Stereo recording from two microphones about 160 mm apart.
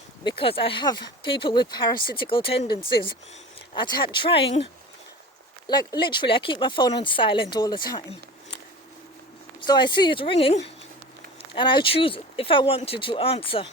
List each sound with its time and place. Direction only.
0.3 s speech: 35° left (ahead or behind)
9.6 s speech: 30° left (ahead or behind)